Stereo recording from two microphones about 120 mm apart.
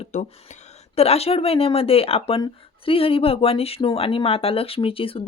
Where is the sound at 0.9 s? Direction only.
60° left (ahead or behind).